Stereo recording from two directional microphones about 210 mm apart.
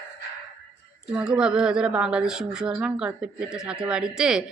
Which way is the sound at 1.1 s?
5° right (ahead or behind).